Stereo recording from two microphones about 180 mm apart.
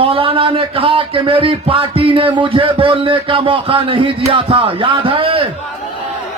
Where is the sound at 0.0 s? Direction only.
30° right (ahead or behind).